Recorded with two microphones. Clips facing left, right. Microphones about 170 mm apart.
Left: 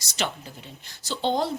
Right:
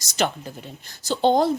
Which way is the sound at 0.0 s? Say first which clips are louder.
Right 6 dB; 45° right (ahead or behind).